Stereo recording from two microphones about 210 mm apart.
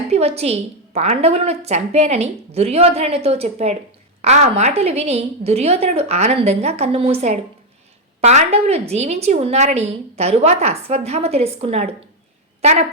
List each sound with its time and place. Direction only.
0.1 s a woman's voice: 30° right (ahead or behind)